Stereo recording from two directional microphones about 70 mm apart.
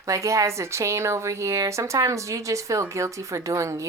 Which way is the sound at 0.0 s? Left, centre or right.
Right.